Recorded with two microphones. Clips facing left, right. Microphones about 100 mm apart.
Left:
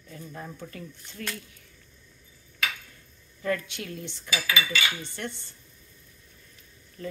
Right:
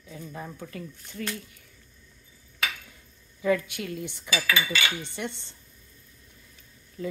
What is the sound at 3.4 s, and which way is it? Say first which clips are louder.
Speech: right 4 dB; 5° right (ahead or behind).